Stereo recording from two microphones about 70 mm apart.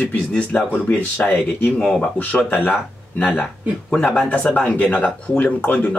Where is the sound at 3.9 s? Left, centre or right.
Centre.